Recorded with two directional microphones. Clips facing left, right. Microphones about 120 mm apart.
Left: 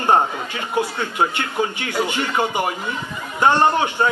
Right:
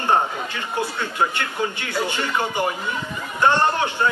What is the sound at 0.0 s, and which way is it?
A man's voice, 15° left (ahead or behind).